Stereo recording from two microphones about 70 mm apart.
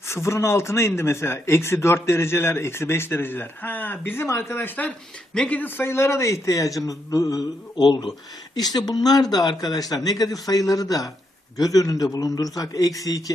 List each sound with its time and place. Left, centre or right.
0.1 s speech: left
4.9 s speech: centre
5.5 s speech: left